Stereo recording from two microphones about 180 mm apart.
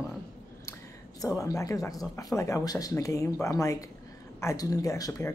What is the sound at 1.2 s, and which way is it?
Speech, 20° left (ahead or behind).